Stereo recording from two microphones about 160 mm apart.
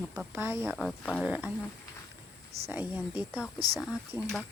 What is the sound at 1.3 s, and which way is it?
Speech, 10° right (ahead or behind).